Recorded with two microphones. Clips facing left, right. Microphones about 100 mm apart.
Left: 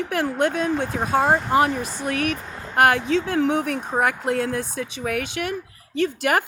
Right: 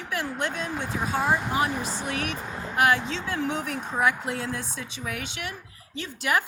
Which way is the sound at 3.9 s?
50° left (ahead or behind).